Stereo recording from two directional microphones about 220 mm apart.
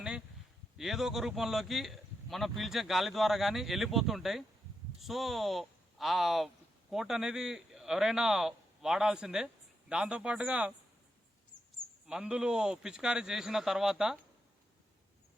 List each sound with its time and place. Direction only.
0.8 s speech: centre (ahead or behind)
11.5 s a sound: 55° left (ahead or behind)
12.0 s speech: 5° right (ahead or behind)